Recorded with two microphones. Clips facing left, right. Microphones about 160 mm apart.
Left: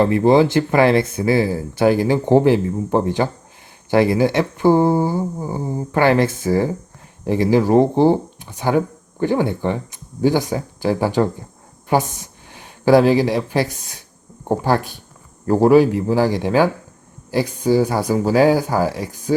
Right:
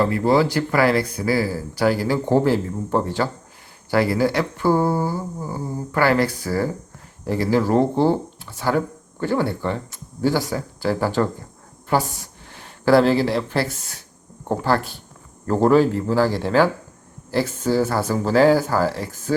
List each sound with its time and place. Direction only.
0.0 s speech: 20° left (ahead or behind)